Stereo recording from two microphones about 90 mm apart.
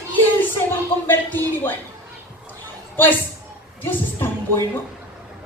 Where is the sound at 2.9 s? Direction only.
25° left (ahead or behind).